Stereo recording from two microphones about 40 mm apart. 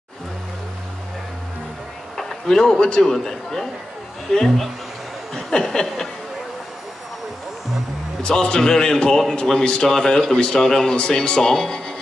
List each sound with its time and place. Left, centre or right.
2.1 s a man's voice: centre
5.3 s a sound: centre
8.2 s speech: centre